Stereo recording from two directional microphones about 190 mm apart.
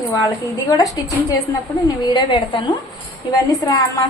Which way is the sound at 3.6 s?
20° left (ahead or behind).